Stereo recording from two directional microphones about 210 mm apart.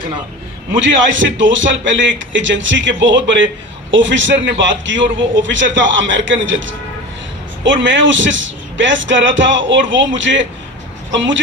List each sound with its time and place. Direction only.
0.8 s a man's voice: 60° right (ahead or behind)